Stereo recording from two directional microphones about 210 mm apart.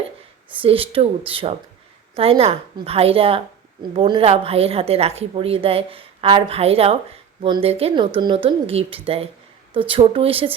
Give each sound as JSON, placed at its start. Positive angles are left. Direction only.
{"t": 0.6, "sound": "a woman's voice", "side_deg": -25}